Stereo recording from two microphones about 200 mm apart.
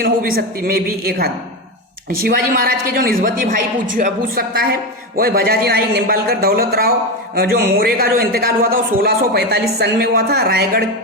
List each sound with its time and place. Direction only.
0.0 s speech: 45° right (ahead or behind)